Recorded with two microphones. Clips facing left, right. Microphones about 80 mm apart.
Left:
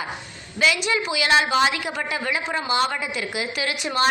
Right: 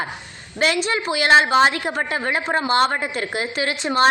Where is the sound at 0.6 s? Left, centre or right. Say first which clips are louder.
Right 1 dB; right.